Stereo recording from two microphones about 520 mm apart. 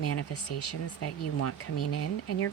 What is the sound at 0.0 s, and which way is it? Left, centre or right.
Speech, left.